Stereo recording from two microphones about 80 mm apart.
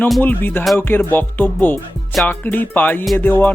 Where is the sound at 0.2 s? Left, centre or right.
Left.